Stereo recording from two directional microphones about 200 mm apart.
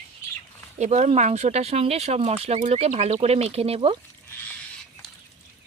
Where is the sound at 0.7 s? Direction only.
35° right (ahead or behind).